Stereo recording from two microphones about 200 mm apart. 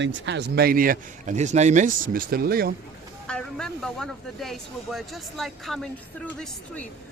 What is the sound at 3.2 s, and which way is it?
Speech, 5° left (ahead or behind).